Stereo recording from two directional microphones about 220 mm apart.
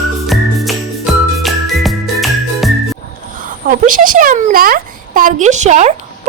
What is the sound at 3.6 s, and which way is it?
A woman's voice, 40° right (ahead or behind).